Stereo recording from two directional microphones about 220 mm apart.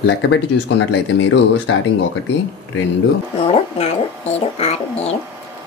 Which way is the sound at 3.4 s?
25° left (ahead or behind).